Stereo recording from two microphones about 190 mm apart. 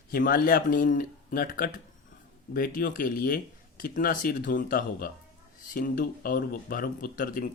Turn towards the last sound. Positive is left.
turn(degrees=45)  # may be behind; listen again after turning